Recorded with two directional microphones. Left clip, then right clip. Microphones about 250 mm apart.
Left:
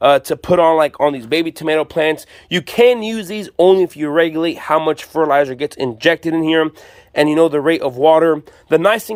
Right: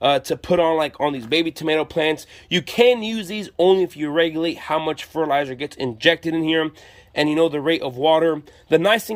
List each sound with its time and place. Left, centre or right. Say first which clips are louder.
0.0 s speech: left 6 dB; centre